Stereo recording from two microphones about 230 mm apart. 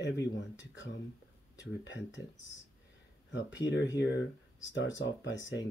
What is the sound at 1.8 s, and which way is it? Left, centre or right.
Speech, left.